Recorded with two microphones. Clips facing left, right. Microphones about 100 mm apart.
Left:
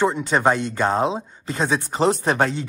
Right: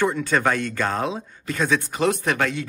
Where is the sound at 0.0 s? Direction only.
20° left (ahead or behind).